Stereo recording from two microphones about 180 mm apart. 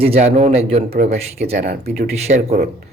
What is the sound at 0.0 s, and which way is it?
Speech, 35° right (ahead or behind).